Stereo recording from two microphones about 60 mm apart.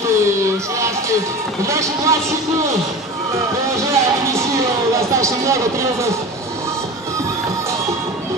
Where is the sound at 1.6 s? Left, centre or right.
Right.